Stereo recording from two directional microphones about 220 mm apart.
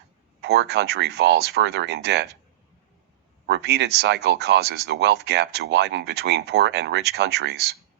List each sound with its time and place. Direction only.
0.4 s speech: 50° right (ahead or behind)
3.4 s speech: 50° right (ahead or behind)